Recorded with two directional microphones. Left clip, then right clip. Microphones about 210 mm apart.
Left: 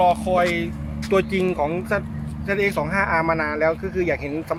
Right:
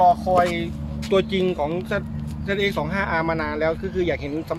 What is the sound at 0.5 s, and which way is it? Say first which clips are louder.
Speech: left 2 dB; 5° left (ahead or behind).